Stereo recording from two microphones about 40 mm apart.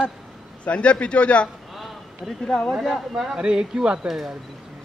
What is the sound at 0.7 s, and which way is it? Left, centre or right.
Speech, left.